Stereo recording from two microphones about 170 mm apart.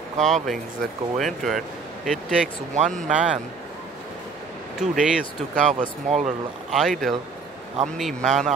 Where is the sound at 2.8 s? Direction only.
45° right (ahead or behind).